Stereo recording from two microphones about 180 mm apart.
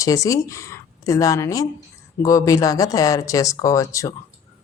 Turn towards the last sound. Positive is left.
turn(degrees=15)  # may be behind; listen again after turning